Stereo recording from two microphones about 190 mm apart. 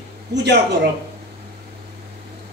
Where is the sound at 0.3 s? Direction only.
65° right (ahead or behind).